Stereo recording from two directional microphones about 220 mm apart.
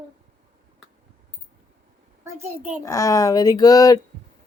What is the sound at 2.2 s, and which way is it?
Speech, 10° right (ahead or behind).